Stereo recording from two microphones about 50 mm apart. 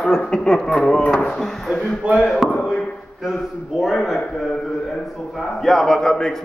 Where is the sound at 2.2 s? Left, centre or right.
Centre.